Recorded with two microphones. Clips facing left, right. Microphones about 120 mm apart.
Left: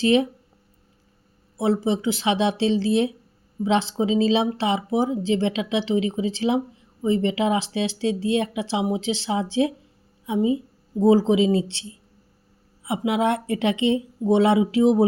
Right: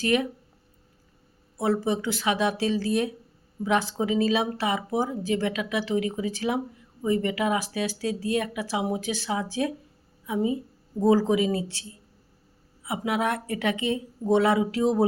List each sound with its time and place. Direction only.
0.0 s speech: 25° left (ahead or behind)
1.5 s speech: 20° left (ahead or behind)